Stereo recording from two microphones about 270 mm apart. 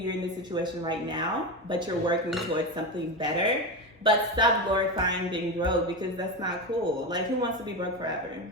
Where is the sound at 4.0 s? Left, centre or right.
Centre.